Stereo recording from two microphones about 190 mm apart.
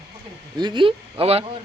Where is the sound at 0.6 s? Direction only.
25° right (ahead or behind).